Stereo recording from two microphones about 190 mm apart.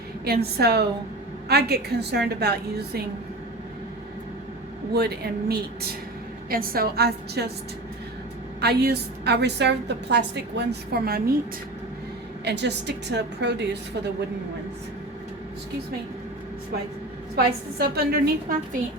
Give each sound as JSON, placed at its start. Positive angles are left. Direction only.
{"t": 0.3, "sound": "a woman's voice", "side_deg": -55}
{"t": 4.9, "sound": "a woman's voice", "side_deg": -55}
{"t": 8.6, "sound": "a woman's voice", "side_deg": -60}
{"t": 12.5, "sound": "a woman's voice", "side_deg": -65}
{"t": 17.3, "sound": "a woman's voice", "side_deg": -55}